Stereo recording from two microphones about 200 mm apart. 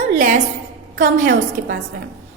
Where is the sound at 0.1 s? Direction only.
40° right (ahead or behind).